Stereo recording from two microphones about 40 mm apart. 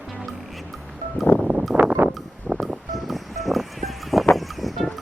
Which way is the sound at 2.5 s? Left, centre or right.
Centre.